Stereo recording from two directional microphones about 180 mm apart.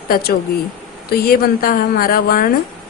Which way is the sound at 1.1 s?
55° left (ahead or behind).